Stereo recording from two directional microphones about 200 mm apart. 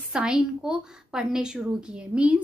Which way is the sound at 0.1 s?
5° right (ahead or behind).